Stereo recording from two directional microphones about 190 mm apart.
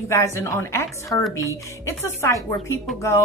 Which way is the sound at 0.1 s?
15° left (ahead or behind).